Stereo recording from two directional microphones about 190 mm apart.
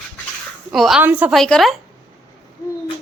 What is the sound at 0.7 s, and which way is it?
A woman's voice, centre (ahead or behind).